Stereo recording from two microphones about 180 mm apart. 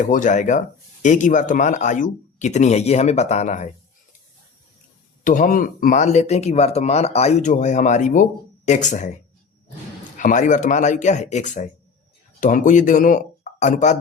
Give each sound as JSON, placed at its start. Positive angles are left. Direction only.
{"t": 0.0, "sound": "speech", "side_deg": 45}
{"t": 5.2, "sound": "speech", "side_deg": 45}
{"t": 10.2, "sound": "speech", "side_deg": 45}